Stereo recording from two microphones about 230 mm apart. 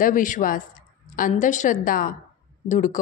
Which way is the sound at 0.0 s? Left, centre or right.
Left.